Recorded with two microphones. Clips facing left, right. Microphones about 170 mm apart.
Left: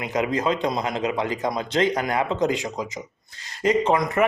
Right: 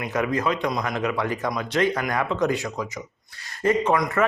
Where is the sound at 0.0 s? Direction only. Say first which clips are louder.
Left 1 dB; 20° left (ahead or behind).